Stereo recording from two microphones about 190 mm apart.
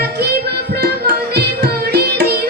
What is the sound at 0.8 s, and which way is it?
Music, 55° right (ahead or behind).